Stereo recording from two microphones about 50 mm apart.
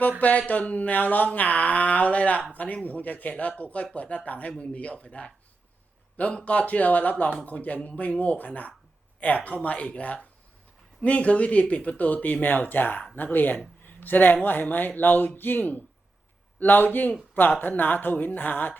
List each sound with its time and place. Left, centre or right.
0.2 s speech: left
6.3 s speech: left
13.8 s a sound: left
14.4 s speech: left